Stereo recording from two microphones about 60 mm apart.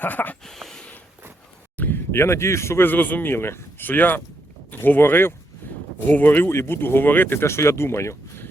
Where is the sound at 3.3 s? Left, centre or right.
Left.